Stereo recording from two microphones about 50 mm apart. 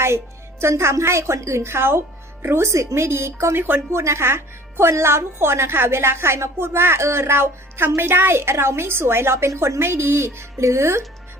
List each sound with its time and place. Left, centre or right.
0.6 s a woman's voice: right
3.9 s a woman's voice: right